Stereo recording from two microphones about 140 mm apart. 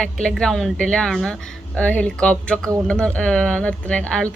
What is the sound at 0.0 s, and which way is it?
Speech, 5° left (ahead or behind).